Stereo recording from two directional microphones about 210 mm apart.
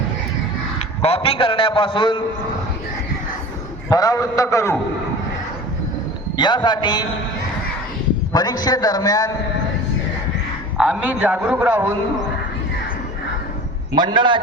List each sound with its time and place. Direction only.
1.0 s a man's voice: 30° left (ahead or behind)
3.8 s a man's voice: 15° left (ahead or behind)
6.3 s a man's voice: 20° left (ahead or behind)
8.3 s a man's voice: 20° left (ahead or behind)
10.8 s a man's voice: 5° right (ahead or behind)
13.9 s a man's voice: 20° right (ahead or behind)